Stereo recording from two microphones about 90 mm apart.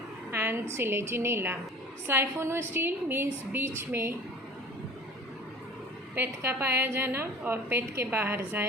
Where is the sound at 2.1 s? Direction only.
30° right (ahead or behind).